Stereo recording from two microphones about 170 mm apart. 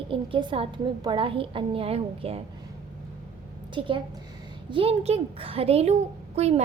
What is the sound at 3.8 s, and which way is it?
A child's voice, 30° right (ahead or behind).